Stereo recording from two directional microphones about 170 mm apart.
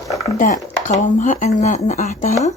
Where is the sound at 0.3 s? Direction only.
50° left (ahead or behind).